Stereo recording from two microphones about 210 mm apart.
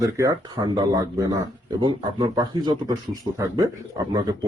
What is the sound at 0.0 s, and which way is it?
Speech, 15° right (ahead or behind).